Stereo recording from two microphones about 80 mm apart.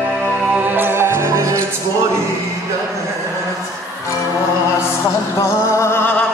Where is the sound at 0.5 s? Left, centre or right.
Right.